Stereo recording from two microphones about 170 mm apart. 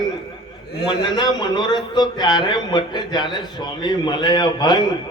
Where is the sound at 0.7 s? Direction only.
70° left (ahead or behind).